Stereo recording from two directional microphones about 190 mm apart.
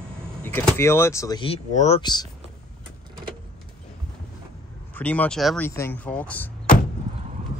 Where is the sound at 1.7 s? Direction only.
35° left (ahead or behind).